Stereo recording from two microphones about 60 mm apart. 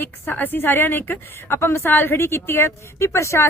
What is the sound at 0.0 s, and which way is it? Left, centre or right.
A woman's voice, left.